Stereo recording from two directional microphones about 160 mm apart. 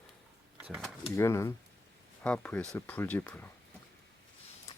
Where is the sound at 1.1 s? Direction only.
15° left (ahead or behind).